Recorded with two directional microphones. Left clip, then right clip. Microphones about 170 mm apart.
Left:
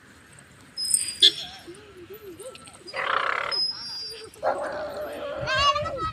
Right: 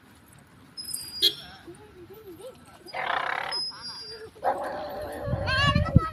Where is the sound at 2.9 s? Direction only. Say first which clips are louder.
Left 3 dB; 55° right (ahead or behind).